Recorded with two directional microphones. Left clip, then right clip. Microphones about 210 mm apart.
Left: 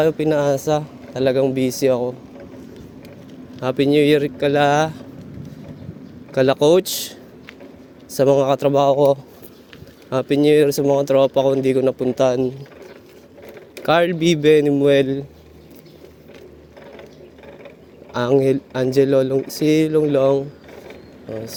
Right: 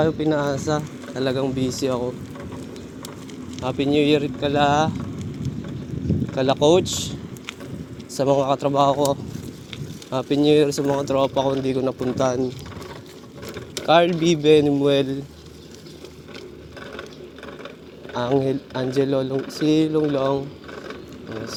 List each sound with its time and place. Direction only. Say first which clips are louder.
0.0 s speech: left 4 dB; 60° left (ahead or behind)
3.6 s speech: left 4 dB; 55° left (ahead or behind)
6.3 s speech: left 3 dB; 55° left (ahead or behind)
13.8 s speech: left 1 dB; 55° left (ahead or behind)
18.1 s speech: left 5 dB; 55° left (ahead or behind)